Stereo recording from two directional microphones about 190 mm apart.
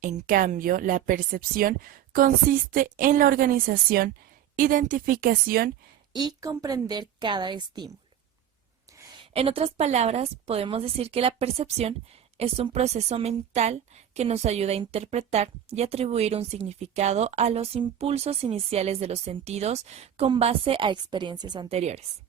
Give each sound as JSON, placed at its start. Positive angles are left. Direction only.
{"t": 0.0, "sound": "speech", "side_deg": -45}
{"t": 6.1, "sound": "a woman's voice", "side_deg": -20}
{"t": 9.3, "sound": "a woman's voice", "side_deg": -30}